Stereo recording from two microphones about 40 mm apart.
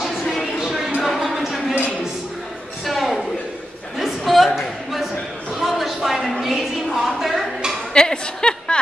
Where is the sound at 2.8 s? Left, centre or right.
Centre.